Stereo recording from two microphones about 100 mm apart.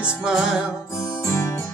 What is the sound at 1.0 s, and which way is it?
Music, 30° left (ahead or behind).